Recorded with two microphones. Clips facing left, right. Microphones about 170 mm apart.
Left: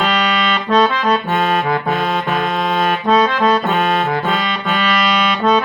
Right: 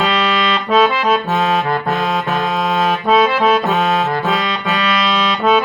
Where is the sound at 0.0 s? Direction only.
Centre (ahead or behind).